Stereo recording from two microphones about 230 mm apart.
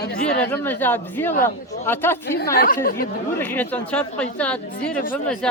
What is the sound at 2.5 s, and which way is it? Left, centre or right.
Speech, left.